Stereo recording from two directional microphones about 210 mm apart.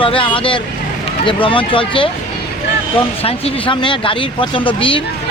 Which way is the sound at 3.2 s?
25° left (ahead or behind).